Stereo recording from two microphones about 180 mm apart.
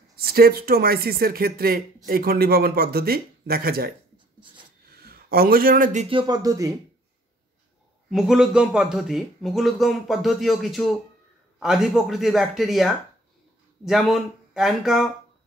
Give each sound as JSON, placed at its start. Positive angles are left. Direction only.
{"t": 0.1, "sound": "speech", "side_deg": -55}
{"t": 4.8, "sound": "a sound", "side_deg": -60}
{"t": 6.0, "sound": "speech", "side_deg": -25}
{"t": 8.1, "sound": "speech", "side_deg": 0}